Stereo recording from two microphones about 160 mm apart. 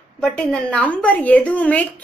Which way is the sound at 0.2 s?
5° left (ahead or behind).